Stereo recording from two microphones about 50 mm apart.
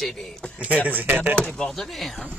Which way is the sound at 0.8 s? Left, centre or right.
Right.